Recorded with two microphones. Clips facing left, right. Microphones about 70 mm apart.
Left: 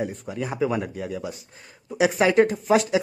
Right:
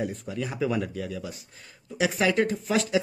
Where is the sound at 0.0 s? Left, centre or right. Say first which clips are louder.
Left 2 dB; centre.